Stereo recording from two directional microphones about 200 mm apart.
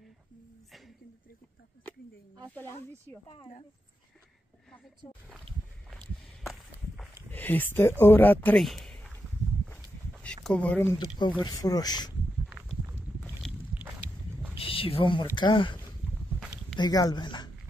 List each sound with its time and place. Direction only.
0.7 s a sound: centre (ahead or behind)
3.3 s speech: 30° left (ahead or behind)
5.9 s walk: centre (ahead or behind)
7.2 s speech: 10° left (ahead or behind)
9.7 s a sound: 5° left (ahead or behind)
11.0 s speech: 20° left (ahead or behind)
12.4 s walk: centre (ahead or behind)
12.9 s boat: centre (ahead or behind)
14.6 s speech: 30° left (ahead or behind)